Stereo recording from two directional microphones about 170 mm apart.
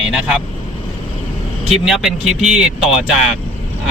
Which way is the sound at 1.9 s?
Centre (ahead or behind).